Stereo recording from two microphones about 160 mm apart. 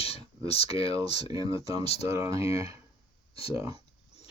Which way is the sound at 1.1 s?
25° right (ahead or behind).